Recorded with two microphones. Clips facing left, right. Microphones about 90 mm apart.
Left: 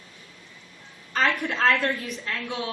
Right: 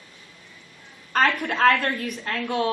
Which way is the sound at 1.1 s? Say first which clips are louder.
Right 3 dB; 50° right (ahead or behind).